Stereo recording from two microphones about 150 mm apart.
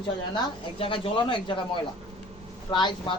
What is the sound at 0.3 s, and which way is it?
Speech, 35° left (ahead or behind).